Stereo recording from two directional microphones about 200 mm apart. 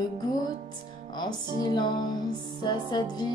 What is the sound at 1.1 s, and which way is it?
Music, 20° left (ahead or behind).